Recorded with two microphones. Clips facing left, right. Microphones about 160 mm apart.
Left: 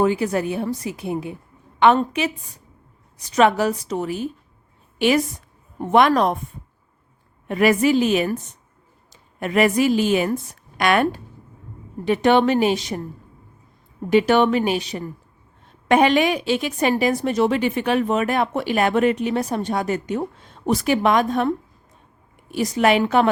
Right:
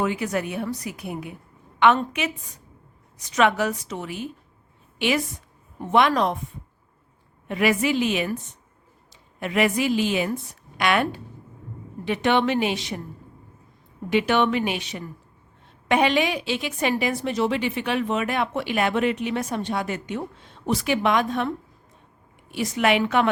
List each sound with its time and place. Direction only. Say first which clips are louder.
0.0 s a woman's voice: left 5 dB; 35° left (ahead or behind)
7.4 s a woman's voice: left 5 dB; 45° left (ahead or behind)
9.4 s a woman's voice: left 4 dB; 45° left (ahead or behind)
14.1 s a woman's voice: left 5 dB; 40° left (ahead or behind)
22.5 s a woman's voice: left 4 dB; 40° left (ahead or behind)